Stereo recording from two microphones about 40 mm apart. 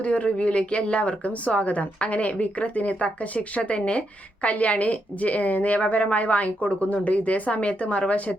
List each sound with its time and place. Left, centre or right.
0.0 s speech: left